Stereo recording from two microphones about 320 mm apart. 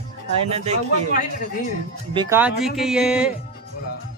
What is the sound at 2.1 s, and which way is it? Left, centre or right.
Speech, centre.